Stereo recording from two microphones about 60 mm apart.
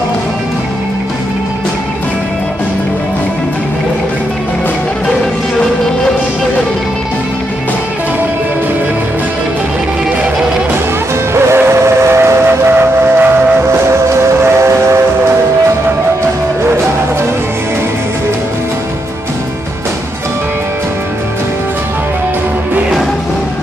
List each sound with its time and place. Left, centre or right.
11.3 s train: right
13.7 s train: right